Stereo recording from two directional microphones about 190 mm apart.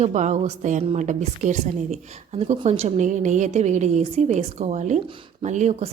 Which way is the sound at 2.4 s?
35° right (ahead or behind).